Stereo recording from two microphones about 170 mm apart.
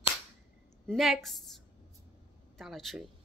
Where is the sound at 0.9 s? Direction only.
Centre (ahead or behind).